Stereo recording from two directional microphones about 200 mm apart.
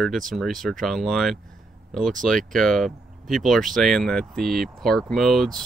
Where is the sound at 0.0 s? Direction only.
Centre (ahead or behind).